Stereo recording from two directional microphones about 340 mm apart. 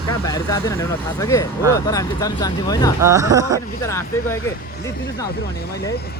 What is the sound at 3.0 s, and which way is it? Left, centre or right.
Speech, centre.